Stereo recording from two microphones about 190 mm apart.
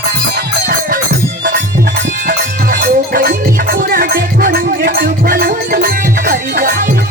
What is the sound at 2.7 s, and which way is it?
Music, 50° right (ahead or behind).